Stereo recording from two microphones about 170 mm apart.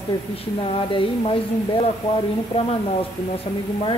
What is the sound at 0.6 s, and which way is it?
Speech, 30° left (ahead or behind).